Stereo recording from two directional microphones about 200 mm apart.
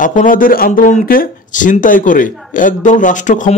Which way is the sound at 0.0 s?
40° left (ahead or behind).